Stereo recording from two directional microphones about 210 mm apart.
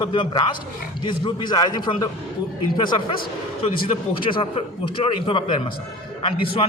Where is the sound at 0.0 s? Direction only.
20° left (ahead or behind).